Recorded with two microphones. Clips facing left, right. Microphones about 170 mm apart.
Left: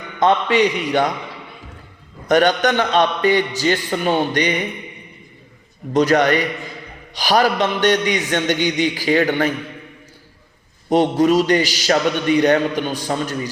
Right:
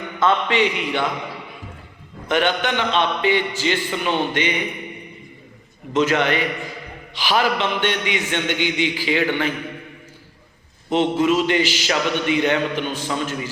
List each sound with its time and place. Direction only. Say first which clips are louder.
0.4 s a man's voice: left 3 dB; 40° left (ahead or behind)
2.2 s a man's voice: left 5 dB; 40° left (ahead or behind)
5.9 s a man's voice: left 4 dB; 40° left (ahead or behind)
10.8 s a man's voice: left 3 dB; 40° left (ahead or behind)